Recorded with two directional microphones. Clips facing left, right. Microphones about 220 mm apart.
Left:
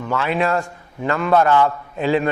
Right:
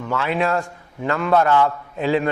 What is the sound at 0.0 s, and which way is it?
A man's voice, 15° left (ahead or behind).